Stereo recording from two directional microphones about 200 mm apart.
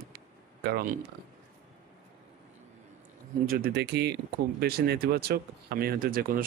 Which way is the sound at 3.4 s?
50° right (ahead or behind).